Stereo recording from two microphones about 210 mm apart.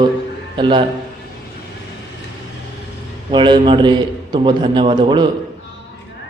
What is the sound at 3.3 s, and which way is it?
A man's voice, 20° right (ahead or behind).